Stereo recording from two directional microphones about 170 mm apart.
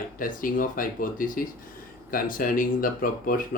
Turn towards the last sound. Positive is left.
turn(degrees=55)  # may be behind; listen again after turning